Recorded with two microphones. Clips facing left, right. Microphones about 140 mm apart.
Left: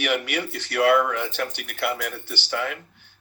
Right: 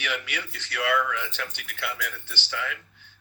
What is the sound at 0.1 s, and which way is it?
A man's voice, 40° left (ahead or behind).